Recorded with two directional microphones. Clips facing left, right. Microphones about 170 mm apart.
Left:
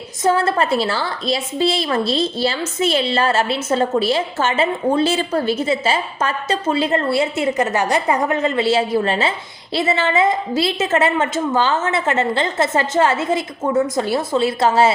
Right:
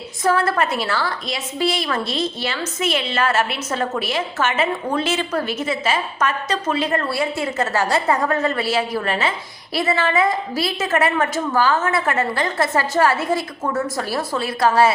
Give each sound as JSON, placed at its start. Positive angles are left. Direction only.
{"t": 0.2, "sound": "a woman's voice", "side_deg": 25}